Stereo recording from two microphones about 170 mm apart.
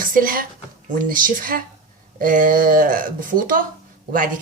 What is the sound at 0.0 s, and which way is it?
A woman's voice, 55° right (ahead or behind).